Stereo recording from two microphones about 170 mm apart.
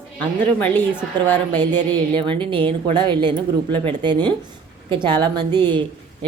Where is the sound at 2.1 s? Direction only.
30° right (ahead or behind).